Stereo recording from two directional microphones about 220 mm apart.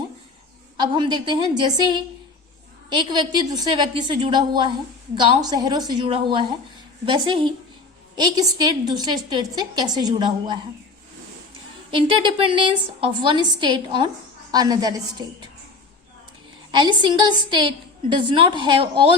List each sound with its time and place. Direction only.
0.8 s a woman's voice: 20° right (ahead or behind)
11.9 s a woman's voice: 25° right (ahead or behind)
16.7 s a woman's voice: 20° right (ahead or behind)